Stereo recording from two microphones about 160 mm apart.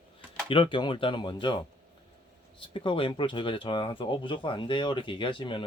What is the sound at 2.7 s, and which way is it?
Speech, 30° left (ahead or behind).